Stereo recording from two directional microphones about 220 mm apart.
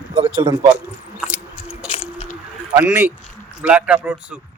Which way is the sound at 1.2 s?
5° right (ahead or behind).